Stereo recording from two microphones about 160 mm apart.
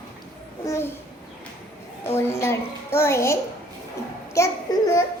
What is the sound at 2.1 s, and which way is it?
A child's voice, 15° left (ahead or behind).